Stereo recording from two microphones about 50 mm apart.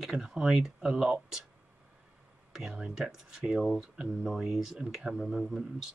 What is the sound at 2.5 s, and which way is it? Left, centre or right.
Speech, centre.